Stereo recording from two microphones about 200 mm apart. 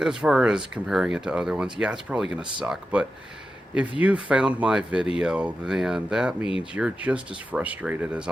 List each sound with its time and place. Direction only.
0.0 s speech: 5° right (ahead or behind)